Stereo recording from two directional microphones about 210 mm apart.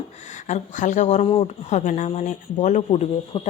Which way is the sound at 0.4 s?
35° left (ahead or behind).